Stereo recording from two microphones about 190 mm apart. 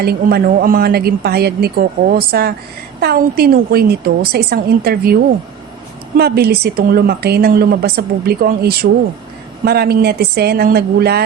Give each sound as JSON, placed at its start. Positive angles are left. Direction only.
{"t": 0.0, "sound": "a woman's voice", "side_deg": -55}
{"t": 6.1, "sound": "a woman's voice", "side_deg": -55}